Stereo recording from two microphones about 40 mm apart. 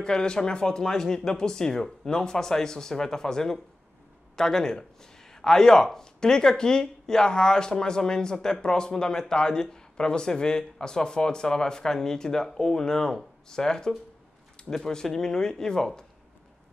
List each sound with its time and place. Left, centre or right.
0.0 s speech: left